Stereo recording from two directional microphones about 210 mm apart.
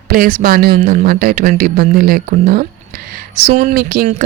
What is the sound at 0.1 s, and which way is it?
Speech, 45° right (ahead or behind).